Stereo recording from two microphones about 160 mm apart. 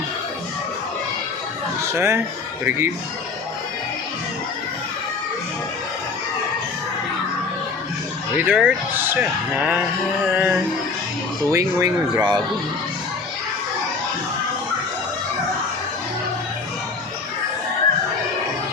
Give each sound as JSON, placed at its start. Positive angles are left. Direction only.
{"t": 1.9, "sound": "speech", "side_deg": -15}
{"t": 8.4, "sound": "speech", "side_deg": -10}